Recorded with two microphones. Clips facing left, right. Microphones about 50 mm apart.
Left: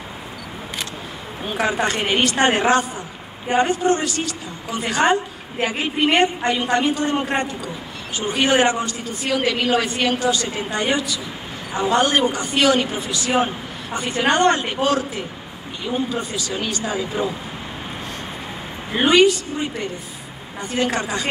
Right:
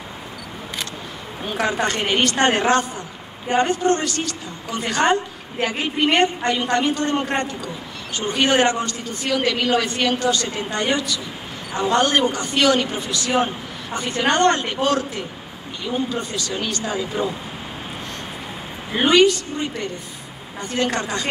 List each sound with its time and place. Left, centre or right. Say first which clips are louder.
1.4 s a woman's voice: left 1 dB; centre
18.9 s a woman's voice: left 1 dB; centre
19.1 s a woman's voice: even; centre